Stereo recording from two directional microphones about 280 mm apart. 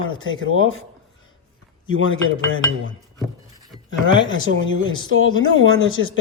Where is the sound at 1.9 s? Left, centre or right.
Left.